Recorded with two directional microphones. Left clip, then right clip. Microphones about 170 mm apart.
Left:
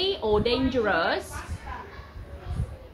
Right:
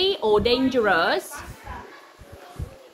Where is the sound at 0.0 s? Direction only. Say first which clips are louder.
Right 4 dB; 70° right (ahead or behind).